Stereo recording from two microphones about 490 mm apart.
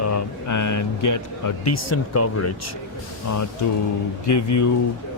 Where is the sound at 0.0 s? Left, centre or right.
Left.